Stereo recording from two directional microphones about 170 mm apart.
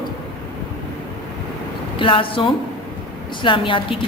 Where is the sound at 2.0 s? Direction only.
30° left (ahead or behind).